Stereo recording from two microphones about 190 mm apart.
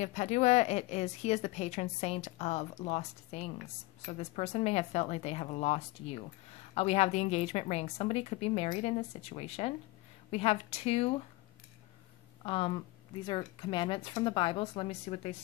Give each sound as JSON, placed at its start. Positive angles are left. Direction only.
{"t": 0.0, "sound": "a woman's voice", "side_deg": 35}
{"t": 12.4, "sound": "speech", "side_deg": 30}